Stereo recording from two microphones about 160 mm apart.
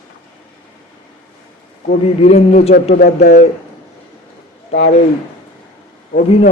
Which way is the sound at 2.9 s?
90° left.